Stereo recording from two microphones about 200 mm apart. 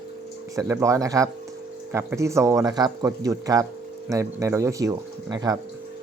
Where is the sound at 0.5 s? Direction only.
15° right (ahead or behind).